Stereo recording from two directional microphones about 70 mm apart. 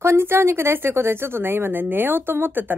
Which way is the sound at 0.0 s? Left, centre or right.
Right.